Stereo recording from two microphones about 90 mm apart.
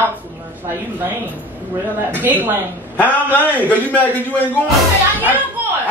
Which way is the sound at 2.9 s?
15° left (ahead or behind).